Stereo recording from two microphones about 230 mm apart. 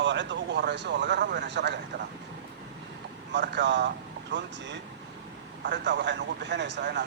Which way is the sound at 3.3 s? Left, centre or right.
Right.